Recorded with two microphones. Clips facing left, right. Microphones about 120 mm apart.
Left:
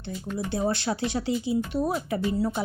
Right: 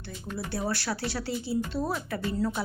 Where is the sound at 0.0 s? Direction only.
20° left (ahead or behind).